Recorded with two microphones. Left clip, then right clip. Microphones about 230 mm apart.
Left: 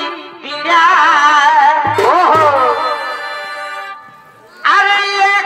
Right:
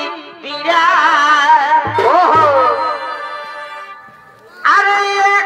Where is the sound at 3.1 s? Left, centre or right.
Left.